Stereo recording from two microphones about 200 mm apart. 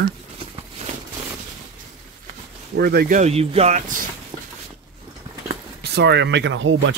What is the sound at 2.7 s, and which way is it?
Speech, 50° right (ahead or behind).